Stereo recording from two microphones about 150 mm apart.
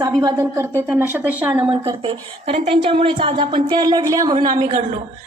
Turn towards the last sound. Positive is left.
turn(degrees=-50)  # may be behind; listen again after turning